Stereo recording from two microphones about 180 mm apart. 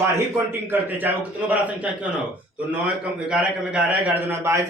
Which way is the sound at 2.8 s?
5° right (ahead or behind).